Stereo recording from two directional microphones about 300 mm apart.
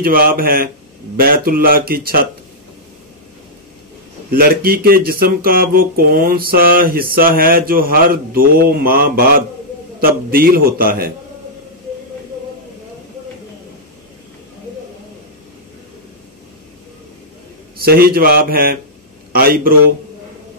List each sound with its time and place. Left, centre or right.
0.0 s speech: right
4.3 s speech: right
17.7 s speech: right